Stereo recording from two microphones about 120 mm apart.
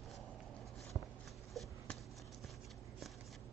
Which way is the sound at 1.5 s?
Centre (ahead or behind).